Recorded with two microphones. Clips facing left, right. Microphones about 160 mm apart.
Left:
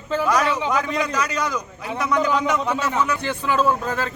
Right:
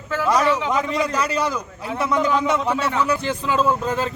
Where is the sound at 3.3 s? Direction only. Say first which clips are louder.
Even; 25° right (ahead or behind).